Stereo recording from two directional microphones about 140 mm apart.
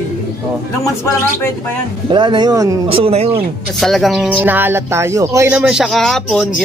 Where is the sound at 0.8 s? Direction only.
20° left (ahead or behind).